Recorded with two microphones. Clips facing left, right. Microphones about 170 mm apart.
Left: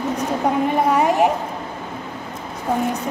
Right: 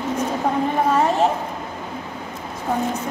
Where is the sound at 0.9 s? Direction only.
15° left (ahead or behind).